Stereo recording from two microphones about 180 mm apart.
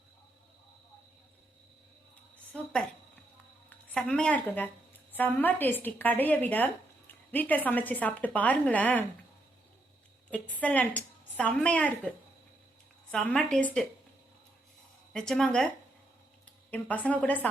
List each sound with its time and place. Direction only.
2.5 s a woman's voice: 5° left (ahead or behind)
10.3 s a woman's voice: 10° left (ahead or behind)
15.1 s a woman's voice: 5° left (ahead or behind)
16.7 s a woman's voice: 10° left (ahead or behind)